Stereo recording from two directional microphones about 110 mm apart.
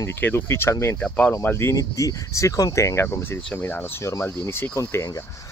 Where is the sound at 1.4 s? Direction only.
20° left (ahead or behind).